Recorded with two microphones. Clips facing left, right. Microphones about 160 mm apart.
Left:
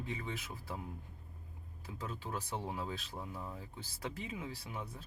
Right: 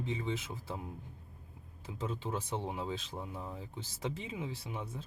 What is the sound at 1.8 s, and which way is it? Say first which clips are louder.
Speech: right 5 dB; 20° right (ahead or behind).